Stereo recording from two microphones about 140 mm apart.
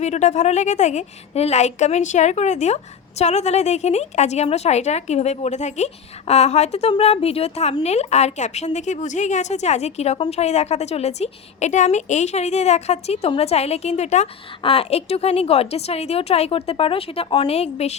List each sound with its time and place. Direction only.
0.0 s a woman's voice: 55° left (ahead or behind)
14.6 s a woman's voice: 45° left (ahead or behind)